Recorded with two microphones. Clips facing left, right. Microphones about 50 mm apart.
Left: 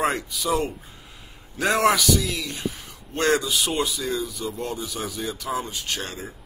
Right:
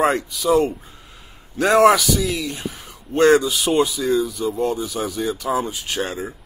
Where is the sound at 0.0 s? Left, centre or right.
Centre.